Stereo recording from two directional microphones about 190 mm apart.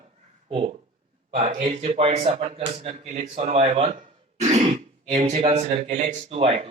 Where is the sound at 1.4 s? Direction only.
35° right (ahead or behind).